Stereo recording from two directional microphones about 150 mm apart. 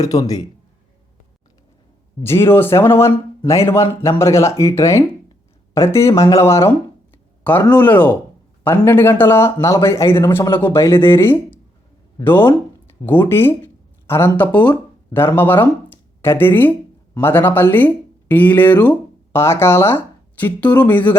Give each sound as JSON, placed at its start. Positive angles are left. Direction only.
{"t": 0.0, "sound": "a man's voice", "side_deg": 25}
{"t": 2.2, "sound": "speech", "side_deg": 15}
{"t": 13.1, "sound": "speech", "side_deg": 15}